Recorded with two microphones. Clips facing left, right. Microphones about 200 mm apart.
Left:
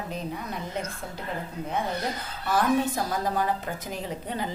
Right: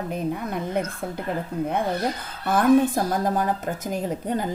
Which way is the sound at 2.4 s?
55° right (ahead or behind).